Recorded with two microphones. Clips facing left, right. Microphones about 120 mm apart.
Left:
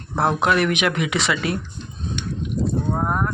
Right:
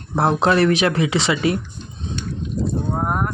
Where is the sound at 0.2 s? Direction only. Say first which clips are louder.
Right 3 dB; 30° right (ahead or behind).